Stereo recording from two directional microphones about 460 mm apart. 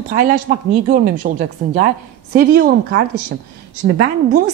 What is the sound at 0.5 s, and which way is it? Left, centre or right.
Speech, centre.